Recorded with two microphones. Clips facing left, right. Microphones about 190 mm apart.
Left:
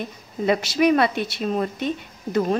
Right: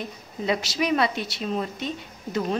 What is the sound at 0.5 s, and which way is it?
A woman's voice, 55° left (ahead or behind).